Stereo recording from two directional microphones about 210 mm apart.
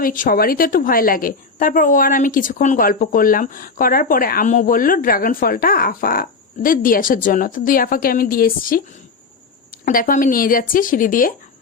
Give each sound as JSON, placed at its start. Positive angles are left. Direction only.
{"t": 0.0, "sound": "a woman's voice", "side_deg": 40}